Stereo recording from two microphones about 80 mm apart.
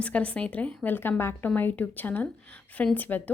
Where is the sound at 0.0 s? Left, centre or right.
Centre.